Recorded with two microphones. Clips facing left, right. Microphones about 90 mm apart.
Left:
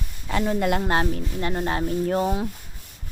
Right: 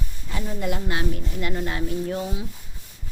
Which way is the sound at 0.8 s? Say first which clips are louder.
Left 4 dB; 40° left (ahead or behind).